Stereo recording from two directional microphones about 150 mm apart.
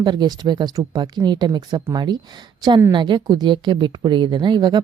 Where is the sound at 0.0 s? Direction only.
30° right (ahead or behind).